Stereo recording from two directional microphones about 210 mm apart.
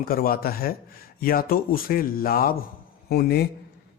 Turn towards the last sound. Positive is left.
turn(degrees=50)  # may be behind; listen again after turning